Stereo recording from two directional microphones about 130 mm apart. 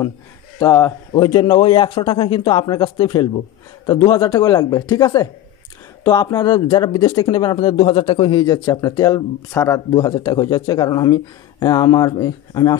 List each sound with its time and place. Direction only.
0.6 s a man's voice: 20° left (ahead or behind)
1.1 s a man's voice: 35° left (ahead or behind)
9.9 s speech: 35° left (ahead or behind)